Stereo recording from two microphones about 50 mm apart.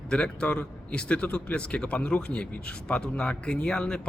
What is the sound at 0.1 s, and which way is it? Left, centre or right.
A man's voice, centre.